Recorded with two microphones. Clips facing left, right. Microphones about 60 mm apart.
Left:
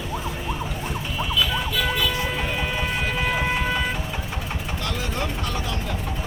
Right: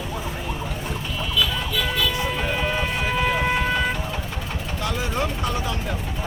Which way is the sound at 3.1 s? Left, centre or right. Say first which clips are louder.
Right 4 dB; centre.